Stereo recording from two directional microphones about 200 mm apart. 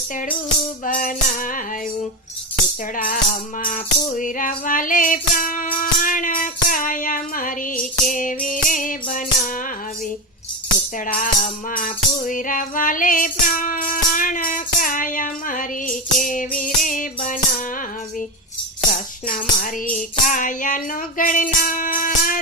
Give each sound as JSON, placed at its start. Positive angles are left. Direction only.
{"t": 0.9, "sound": "music", "side_deg": 45}
{"t": 2.9, "sound": "music", "side_deg": 40}
{"t": 11.0, "sound": "music", "side_deg": 45}
{"t": 18.9, "sound": "music", "side_deg": 40}